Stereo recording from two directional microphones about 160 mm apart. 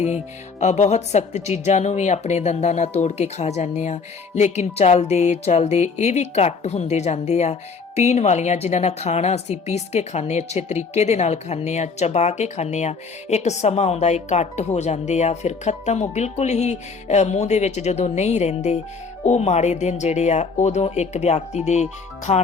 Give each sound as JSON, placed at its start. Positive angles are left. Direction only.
{"t": 0.6, "sound": "a woman's voice", "side_deg": 45}